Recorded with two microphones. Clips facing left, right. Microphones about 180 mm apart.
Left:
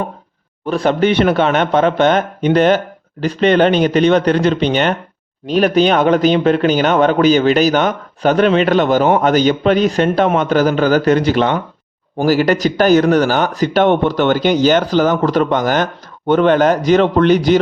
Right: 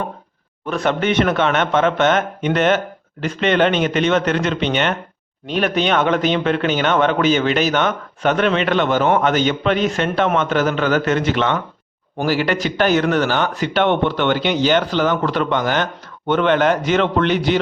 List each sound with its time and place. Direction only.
0.6 s speech: 35° left (ahead or behind)